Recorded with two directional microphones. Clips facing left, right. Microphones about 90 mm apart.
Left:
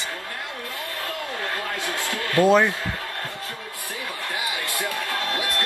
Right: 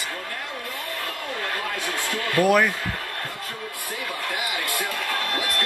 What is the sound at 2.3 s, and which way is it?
Speech, 25° left (ahead or behind).